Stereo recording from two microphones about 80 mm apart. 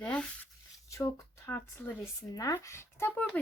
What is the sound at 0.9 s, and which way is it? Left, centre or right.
Speech, left.